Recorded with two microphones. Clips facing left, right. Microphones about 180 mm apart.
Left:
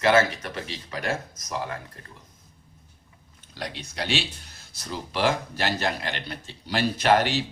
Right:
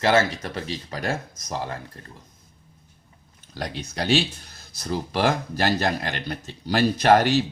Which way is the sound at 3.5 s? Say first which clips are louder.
Right 4 dB; 45° right (ahead or behind).